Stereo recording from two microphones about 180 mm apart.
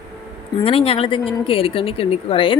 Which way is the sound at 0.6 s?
30° left (ahead or behind).